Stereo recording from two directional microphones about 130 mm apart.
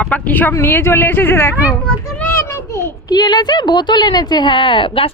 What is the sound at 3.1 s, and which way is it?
Speech, 30° left (ahead or behind).